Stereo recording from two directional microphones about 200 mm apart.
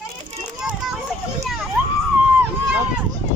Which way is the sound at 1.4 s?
Centre (ahead or behind).